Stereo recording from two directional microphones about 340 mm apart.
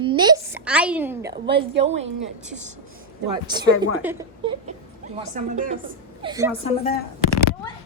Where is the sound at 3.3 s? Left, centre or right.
Centre.